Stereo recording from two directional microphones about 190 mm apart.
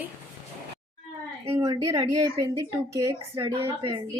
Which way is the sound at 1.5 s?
15° right (ahead or behind).